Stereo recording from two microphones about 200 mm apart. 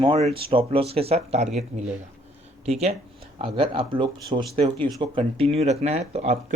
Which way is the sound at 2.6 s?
30° right (ahead or behind).